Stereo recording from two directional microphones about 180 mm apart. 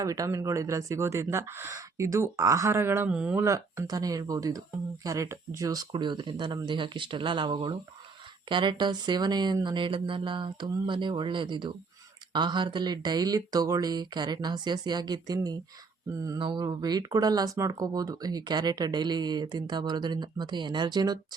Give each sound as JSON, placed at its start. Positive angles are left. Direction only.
{"t": 0.0, "sound": "speech", "side_deg": -15}
{"t": 3.4, "sound": "speech", "side_deg": -15}